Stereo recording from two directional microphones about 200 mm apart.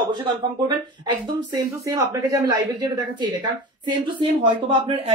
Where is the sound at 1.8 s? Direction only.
15° right (ahead or behind).